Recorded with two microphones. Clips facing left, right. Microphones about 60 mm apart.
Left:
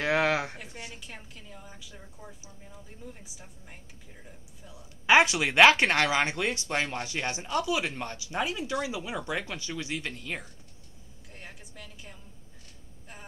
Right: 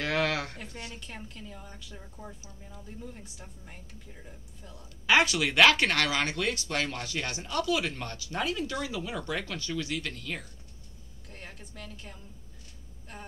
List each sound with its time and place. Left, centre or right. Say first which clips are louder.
0.0 s a sound: left 3 dB; centre
0.7 s a woman's voice: right 1 dB; centre
0.9 s speech: right 2 dB; centre
5.0 s speech: left 3 dB; left
11.2 s a woman's voice: right 1 dB; centre